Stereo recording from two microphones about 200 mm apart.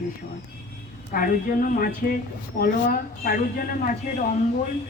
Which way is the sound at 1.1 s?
45° left (ahead or behind).